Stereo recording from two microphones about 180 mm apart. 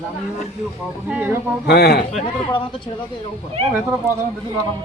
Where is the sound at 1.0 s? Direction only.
10° right (ahead or behind).